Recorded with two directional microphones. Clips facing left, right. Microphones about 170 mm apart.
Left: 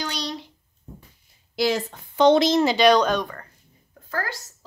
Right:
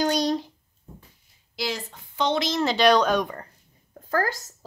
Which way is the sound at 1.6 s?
55° left (ahead or behind).